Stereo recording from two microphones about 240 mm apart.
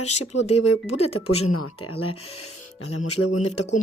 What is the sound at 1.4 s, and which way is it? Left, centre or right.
Speech, left.